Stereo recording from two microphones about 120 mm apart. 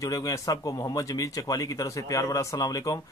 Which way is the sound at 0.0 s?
30° left (ahead or behind).